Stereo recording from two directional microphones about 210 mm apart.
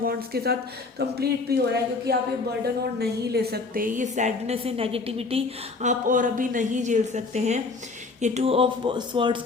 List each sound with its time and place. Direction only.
0.0 s a woman's voice: 45° right (ahead or behind); by 5.4 s 25° right (ahead or behind)
5.8 s a woman's voice: 35° right (ahead or behind)